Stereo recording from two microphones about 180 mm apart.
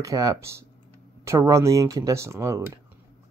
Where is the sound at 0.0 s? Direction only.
20° right (ahead or behind).